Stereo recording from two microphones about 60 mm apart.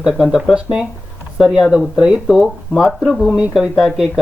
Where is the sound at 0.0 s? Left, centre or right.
Centre.